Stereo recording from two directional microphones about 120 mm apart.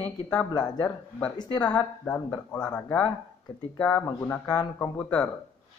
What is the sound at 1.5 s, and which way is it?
Speech, 10° left (ahead or behind).